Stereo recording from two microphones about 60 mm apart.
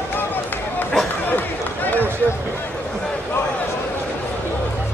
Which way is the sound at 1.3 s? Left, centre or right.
Left.